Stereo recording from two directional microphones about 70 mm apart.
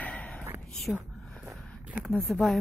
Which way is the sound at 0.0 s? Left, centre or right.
Centre.